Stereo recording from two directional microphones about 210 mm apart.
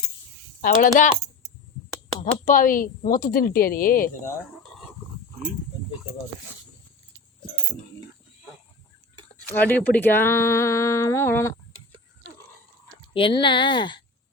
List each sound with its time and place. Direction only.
0.6 s speech: 40° left (ahead or behind)
2.2 s speech: 40° left (ahead or behind)
9.5 s speech: 10° left (ahead or behind)
13.1 s speech: 25° left (ahead or behind)